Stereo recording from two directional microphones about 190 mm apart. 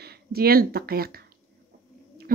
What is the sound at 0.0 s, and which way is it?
Speech, 55° right (ahead or behind).